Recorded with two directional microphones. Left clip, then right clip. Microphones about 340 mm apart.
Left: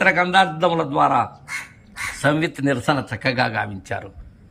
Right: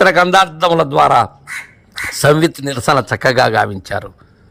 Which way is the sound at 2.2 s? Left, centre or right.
Centre.